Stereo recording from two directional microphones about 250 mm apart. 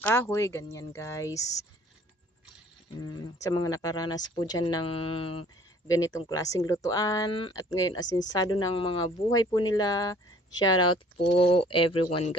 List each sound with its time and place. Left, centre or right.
0.0 s speech: centre
3.0 s speech: centre